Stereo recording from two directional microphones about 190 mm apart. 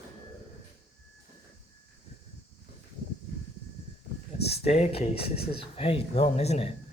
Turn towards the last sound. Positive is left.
turn(degrees=30)  # may be behind; listen again after turning